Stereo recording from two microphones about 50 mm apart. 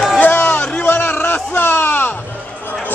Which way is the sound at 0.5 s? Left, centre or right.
Left.